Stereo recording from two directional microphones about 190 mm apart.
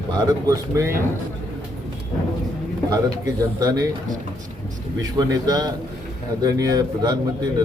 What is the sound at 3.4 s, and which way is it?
Speech, 20° right (ahead or behind).